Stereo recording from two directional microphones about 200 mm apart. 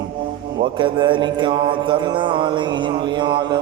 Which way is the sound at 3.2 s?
25° right (ahead or behind).